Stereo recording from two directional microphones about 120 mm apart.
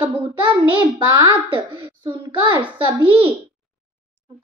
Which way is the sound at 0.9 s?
40° right (ahead or behind).